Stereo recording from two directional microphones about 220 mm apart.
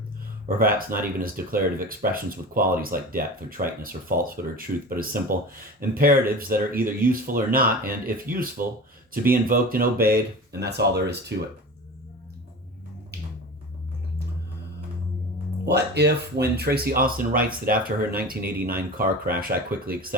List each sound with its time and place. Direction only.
0.5 s speech: 40° right (ahead or behind)
15.6 s speech: 50° right (ahead or behind)